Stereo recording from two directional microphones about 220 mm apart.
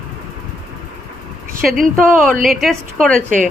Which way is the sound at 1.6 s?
Centre (ahead or behind).